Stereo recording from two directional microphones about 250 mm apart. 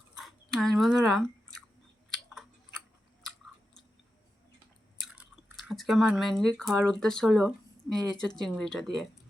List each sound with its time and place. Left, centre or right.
0.2 s chewing: centre
5.1 s drip: centre
6.6 s speech: centre